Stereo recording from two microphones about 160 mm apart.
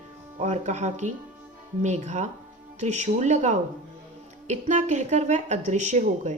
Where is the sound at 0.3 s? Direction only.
45° right (ahead or behind).